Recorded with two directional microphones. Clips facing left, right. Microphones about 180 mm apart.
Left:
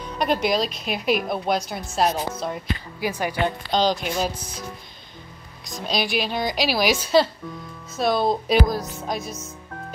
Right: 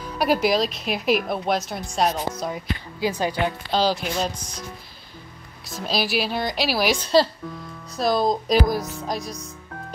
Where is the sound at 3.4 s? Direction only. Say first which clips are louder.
Left 2 dB; 5° right (ahead or behind).